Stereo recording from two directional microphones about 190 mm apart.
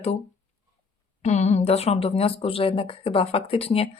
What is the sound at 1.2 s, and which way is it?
Speech, 35° left (ahead or behind).